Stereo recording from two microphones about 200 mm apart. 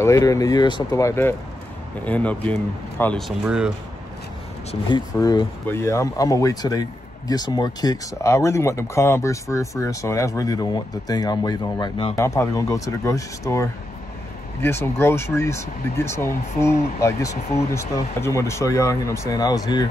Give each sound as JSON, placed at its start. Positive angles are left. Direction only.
{"t": 0.0, "sound": "speech", "side_deg": 15}
{"t": 4.6, "sound": "speech", "side_deg": 20}